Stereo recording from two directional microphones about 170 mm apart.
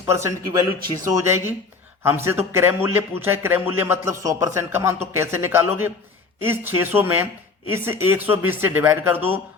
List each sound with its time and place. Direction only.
0.0 s a man's voice: 15° right (ahead or behind)